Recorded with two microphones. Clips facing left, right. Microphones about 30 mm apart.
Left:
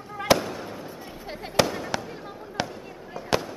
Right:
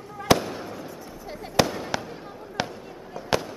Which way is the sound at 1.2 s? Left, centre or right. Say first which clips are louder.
Left 1 dB; left.